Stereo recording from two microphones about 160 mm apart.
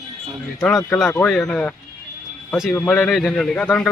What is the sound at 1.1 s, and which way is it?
A man's voice, 15° left (ahead or behind).